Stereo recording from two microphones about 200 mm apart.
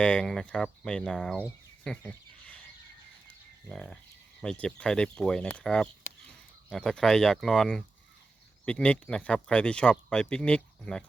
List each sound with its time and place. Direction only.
0.0 s speech: 5° left (ahead or behind)
1.8 s a sound: 5° left (ahead or behind)
3.7 s speech: 5° left (ahead or behind)